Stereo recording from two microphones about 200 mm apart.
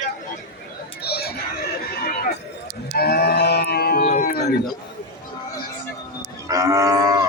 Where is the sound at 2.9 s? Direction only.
50° left (ahead or behind).